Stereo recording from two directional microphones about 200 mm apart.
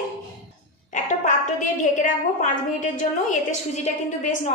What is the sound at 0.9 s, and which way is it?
A woman's voice, 40° left (ahead or behind).